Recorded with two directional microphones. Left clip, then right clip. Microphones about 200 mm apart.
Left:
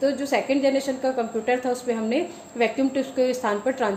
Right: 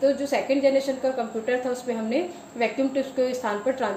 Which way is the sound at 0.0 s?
50° left (ahead or behind).